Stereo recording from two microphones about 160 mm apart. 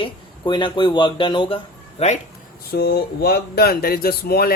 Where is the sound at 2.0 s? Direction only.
40° left (ahead or behind).